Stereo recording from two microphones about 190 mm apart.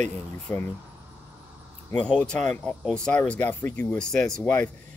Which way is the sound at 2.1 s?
5° left (ahead or behind).